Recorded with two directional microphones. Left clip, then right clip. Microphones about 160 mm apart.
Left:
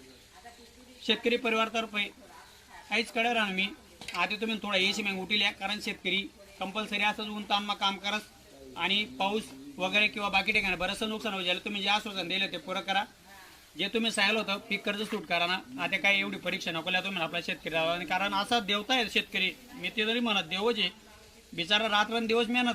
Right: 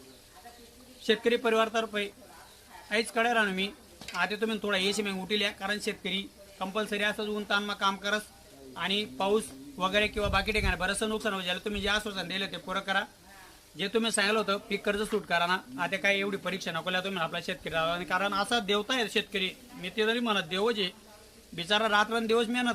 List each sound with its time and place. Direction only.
1.0 s speech: 20° right (ahead or behind)